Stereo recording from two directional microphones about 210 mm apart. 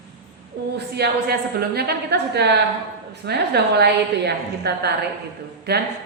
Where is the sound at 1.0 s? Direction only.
50° right (ahead or behind).